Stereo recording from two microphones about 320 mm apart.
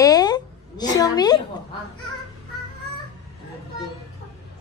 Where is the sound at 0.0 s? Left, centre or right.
Centre.